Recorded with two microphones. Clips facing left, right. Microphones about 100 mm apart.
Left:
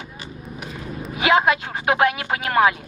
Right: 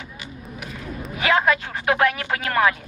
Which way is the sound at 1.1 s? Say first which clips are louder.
Left 2 dB; 20° left (ahead or behind).